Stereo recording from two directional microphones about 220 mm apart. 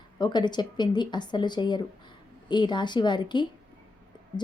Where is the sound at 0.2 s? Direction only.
20° left (ahead or behind).